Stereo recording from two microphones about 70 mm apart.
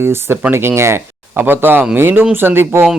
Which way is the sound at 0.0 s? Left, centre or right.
Right.